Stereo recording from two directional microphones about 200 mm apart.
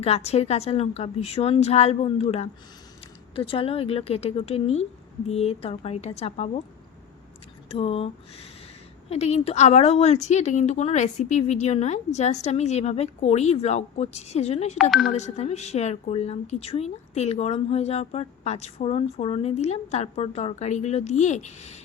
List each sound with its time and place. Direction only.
0.0 s a woman's voice: 30° left (ahead or behind)
7.7 s a woman's voice: 30° left (ahead or behind)
14.8 s speech: centre (ahead or behind)
15.1 s a woman's voice: 35° left (ahead or behind)